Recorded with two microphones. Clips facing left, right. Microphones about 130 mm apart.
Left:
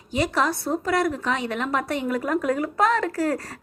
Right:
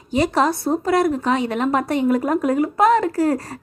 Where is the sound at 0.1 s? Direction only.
30° right (ahead or behind).